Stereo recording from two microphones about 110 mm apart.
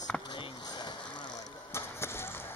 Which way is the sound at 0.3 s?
45° left (ahead or behind).